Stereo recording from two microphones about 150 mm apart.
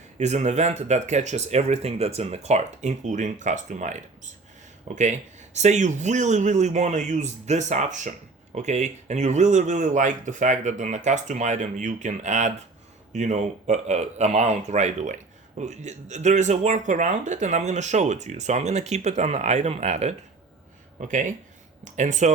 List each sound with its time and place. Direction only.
0.2 s speech: 50° right (ahead or behind)
21.0 s speech: 60° right (ahead or behind)